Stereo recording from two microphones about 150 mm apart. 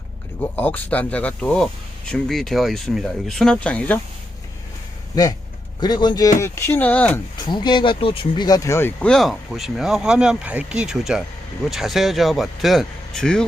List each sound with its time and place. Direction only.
0.5 s speech: 10° left (ahead or behind)
5.2 s speech: 25° left (ahead or behind)
6.4 s speech: 15° left (ahead or behind)
7.3 s speech: 30° left (ahead or behind); by 13.4 s 5° left (ahead or behind)